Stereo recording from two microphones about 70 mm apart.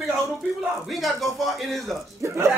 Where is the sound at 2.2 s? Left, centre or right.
Right.